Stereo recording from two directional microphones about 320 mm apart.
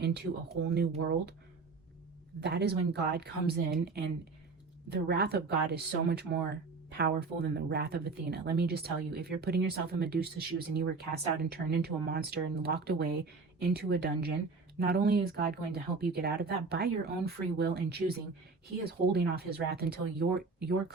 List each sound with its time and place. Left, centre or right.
0.0 s speech: right
2.4 s speech: right